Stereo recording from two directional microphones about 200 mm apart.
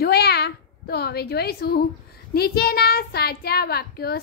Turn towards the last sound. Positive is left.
turn(degrees=50)  # may be behind; listen again after turning